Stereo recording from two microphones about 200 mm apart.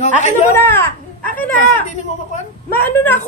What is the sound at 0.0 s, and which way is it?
Speech, 35° left (ahead or behind).